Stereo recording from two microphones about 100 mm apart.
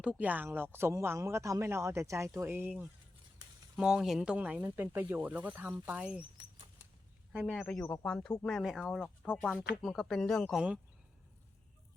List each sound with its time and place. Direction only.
0.0 s speech: 15° right (ahead or behind)
3.8 s speech: 5° right (ahead or behind)
4.6 s speech: 25° right (ahead or behind)
7.5 s speech: 5° left (ahead or behind)